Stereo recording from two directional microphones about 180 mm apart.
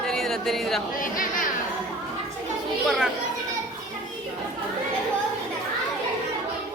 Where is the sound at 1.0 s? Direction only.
50° left (ahead or behind).